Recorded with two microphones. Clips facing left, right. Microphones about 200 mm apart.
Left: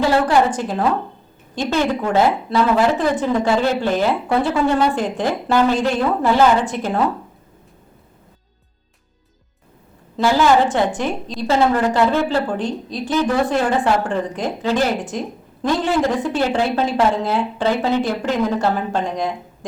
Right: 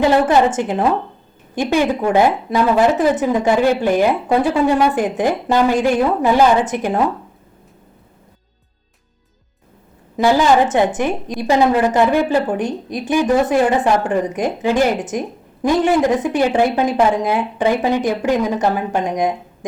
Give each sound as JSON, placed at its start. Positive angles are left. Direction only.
{"t": 0.0, "sound": "a woman's voice", "side_deg": -20}
{"t": 10.2, "sound": "speech", "side_deg": -15}